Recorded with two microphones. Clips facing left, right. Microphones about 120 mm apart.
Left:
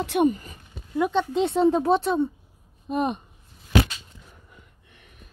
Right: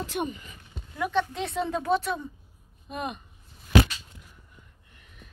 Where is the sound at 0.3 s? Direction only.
40° left (ahead or behind).